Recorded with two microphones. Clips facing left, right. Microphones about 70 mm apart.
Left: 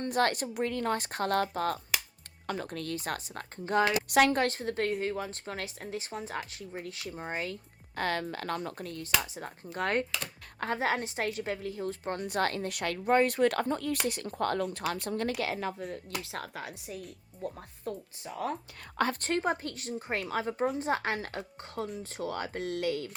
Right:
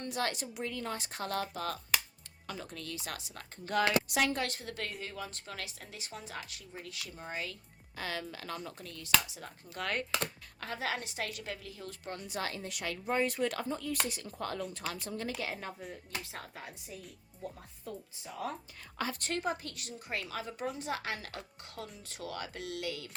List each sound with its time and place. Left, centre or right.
0.0 s a woman's voice: left
3.7 s speech: left
4.1 s a woman's voice: left
15.8 s speech: left
16.2 s a woman's voice: left
19.2 s speech: left